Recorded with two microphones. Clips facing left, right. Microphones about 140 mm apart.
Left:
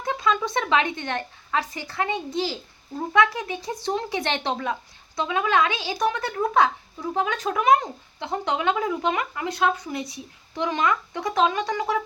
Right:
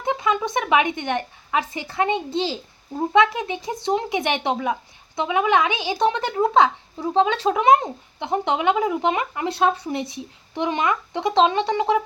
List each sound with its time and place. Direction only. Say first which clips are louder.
0.0 s speech: right 2 dB; 20° right (ahead or behind)